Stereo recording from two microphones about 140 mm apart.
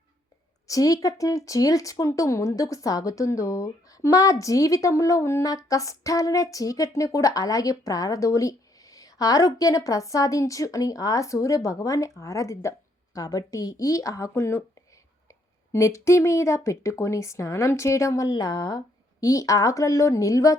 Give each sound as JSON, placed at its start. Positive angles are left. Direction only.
{"t": 0.7, "sound": "speech", "side_deg": 25}